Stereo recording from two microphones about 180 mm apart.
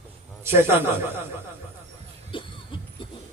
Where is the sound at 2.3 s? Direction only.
30° left (ahead or behind).